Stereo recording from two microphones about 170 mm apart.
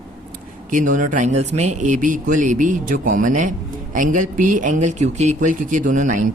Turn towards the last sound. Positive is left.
turn(degrees=-50)  # may be behind; listen again after turning